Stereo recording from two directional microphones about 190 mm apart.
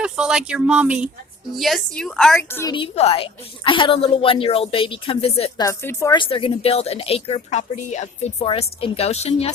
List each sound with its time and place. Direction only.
0.0 s speech: 5° right (ahead or behind)
2.5 s speech: 15° left (ahead or behind)
2.7 s a woman's voice: 30° left (ahead or behind)
5.6 s speech: 15° left (ahead or behind)
6.1 s a woman's voice: 30° left (ahead or behind)